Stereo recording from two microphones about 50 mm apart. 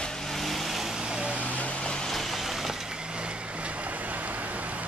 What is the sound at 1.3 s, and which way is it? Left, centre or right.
Vehicle, right.